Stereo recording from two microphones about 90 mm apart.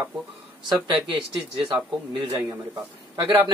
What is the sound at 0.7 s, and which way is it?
Speech, 60° right (ahead or behind).